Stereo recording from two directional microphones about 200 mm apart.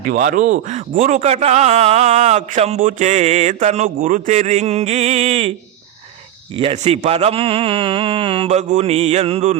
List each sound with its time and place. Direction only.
0.0 s a man's voice: 40° right (ahead or behind)
6.6 s speech: 30° right (ahead or behind)